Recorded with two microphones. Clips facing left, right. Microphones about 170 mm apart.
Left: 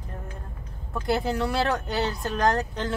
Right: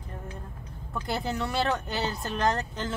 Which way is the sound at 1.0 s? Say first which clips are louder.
Left 6 dB; centre (ahead or behind).